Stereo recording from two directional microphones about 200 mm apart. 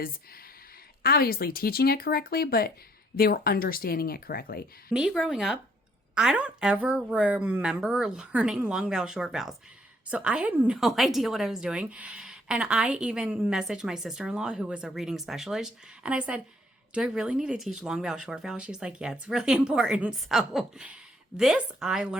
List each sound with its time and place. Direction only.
1.0 s speech: 50° left (ahead or behind)
4.9 s a woman's voice: 5° right (ahead or behind)